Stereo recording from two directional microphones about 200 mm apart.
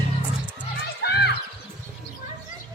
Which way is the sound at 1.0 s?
55° left (ahead or behind).